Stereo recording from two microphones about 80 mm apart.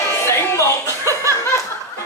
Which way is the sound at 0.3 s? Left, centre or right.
Left.